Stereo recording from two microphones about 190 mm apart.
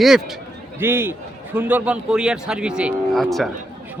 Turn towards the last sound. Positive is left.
turn(degrees=0)  # may be behind; listen again after turning